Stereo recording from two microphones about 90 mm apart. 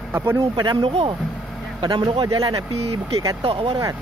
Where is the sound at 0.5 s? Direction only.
50° right (ahead or behind).